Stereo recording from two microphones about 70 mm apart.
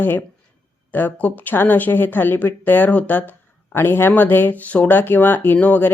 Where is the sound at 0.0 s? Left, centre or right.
Left.